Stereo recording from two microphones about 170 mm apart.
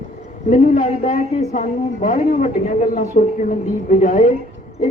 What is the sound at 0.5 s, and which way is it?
A woman's voice, 45° left (ahead or behind).